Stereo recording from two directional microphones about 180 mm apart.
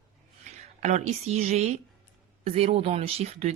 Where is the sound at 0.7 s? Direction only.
40° right (ahead or behind).